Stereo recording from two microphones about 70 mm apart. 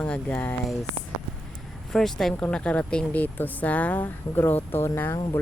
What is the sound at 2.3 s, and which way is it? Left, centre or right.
Speech, centre.